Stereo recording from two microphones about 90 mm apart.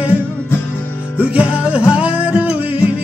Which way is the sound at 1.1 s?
15° right (ahead or behind).